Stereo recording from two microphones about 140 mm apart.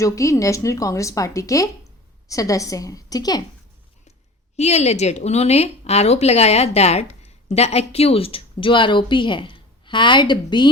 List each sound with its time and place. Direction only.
0.0 s a woman's voice: 20° left (ahead or behind)
4.5 s a woman's voice: 50° left (ahead or behind); by 10.7 s 35° left (ahead or behind)